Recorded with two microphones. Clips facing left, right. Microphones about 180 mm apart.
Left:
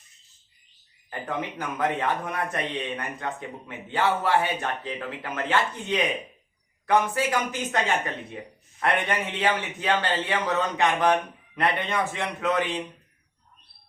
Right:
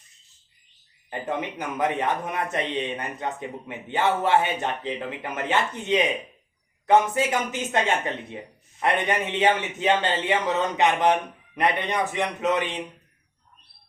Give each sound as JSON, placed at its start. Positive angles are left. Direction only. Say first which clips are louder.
{"t": 1.2, "sound": "speech", "louder": "right 2 dB", "side_deg": -20}